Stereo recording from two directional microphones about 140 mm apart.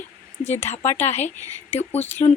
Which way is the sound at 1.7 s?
50° left (ahead or behind).